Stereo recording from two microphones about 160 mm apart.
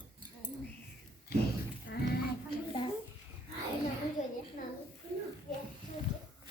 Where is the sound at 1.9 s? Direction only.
90° left.